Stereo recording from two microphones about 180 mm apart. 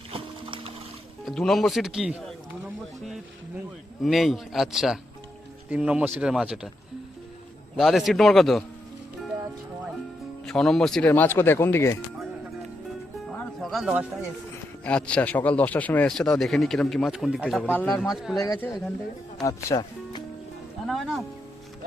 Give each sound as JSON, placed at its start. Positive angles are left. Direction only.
{"t": 0.1, "sound": "a sound", "side_deg": -30}
{"t": 1.2, "sound": "speech", "side_deg": 0}
{"t": 4.0, "sound": "speech", "side_deg": 0}
{"t": 7.8, "sound": "speech", "side_deg": 0}
{"t": 10.4, "sound": "speech", "side_deg": 0}
{"t": 13.2, "sound": "music", "side_deg": 0}
{"t": 14.8, "sound": "speech", "side_deg": 5}
{"t": 17.6, "sound": "speech", "side_deg": 10}
{"t": 18.3, "sound": "speech", "side_deg": 20}
{"t": 20.8, "sound": "speech", "side_deg": 0}